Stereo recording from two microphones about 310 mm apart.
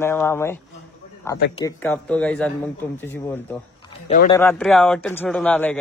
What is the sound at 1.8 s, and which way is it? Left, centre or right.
Speech, centre.